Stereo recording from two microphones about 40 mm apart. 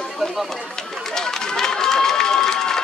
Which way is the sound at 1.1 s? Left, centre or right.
Centre.